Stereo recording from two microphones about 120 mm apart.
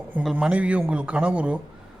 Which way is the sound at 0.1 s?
10° right (ahead or behind).